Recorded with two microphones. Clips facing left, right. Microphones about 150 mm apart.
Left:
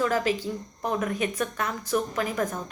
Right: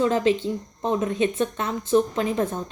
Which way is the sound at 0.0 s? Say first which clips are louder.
Right 4 dB; 25° right (ahead or behind).